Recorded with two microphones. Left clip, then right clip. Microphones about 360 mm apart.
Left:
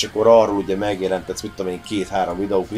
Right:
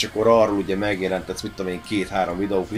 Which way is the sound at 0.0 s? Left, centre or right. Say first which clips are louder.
Left 4 dB; left.